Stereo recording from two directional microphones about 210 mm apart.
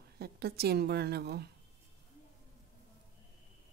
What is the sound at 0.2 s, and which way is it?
A woman's voice, 50° right (ahead or behind).